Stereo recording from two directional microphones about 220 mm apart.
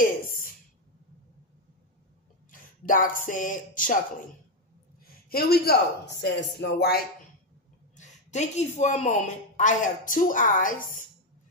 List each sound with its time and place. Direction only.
0.0 s a sound: 40° left (ahead or behind)
2.5 s speech: 40° left (ahead or behind)
5.0 s speech: 45° left (ahead or behind)
7.9 s speech: 30° left (ahead or behind)